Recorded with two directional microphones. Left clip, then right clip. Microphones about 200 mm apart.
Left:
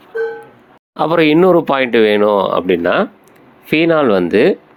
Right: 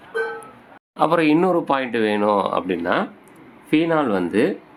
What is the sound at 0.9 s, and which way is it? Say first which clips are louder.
Speech: left 6 dB; 30° left (ahead or behind).